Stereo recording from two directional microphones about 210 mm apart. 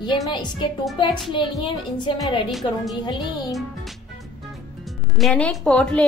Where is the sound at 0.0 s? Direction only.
20° left (ahead or behind).